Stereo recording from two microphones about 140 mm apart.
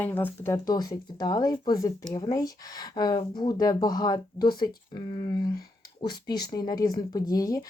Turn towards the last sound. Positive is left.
turn(degrees=25)  # may be behind; listen again after turning